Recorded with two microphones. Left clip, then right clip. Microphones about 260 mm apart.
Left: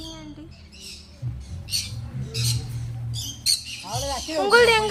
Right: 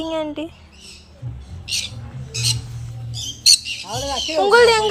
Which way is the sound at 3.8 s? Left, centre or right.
Left.